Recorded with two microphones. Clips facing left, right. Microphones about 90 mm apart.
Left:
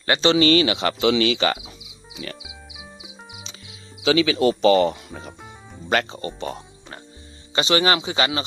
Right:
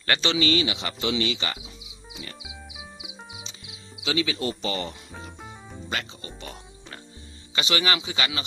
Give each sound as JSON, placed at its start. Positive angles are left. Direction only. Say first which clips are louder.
{"t": 0.2, "sound": "speech", "louder": "left 8 dB", "side_deg": 35}
{"t": 0.4, "sound": "cricket", "louder": "left 7 dB", "side_deg": 60}
{"t": 4.0, "sound": "speech", "louder": "left 9 dB", "side_deg": 90}
{"t": 5.9, "sound": "speech", "louder": "left 11 dB", "side_deg": 50}
{"t": 7.5, "sound": "speech", "louder": "left 6 dB", "side_deg": 30}